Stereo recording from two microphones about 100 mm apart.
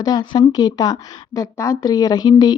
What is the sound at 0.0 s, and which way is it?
Speech, 45° left (ahead or behind).